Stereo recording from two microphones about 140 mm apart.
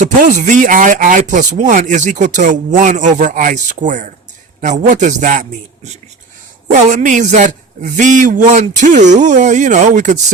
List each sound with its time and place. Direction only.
0.0 s speech: 65° right (ahead or behind)
6.9 s speech: 65° right (ahead or behind)